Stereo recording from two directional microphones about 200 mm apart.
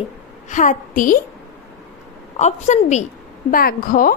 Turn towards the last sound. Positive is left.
turn(degrees=45)  # may be behind; listen again after turning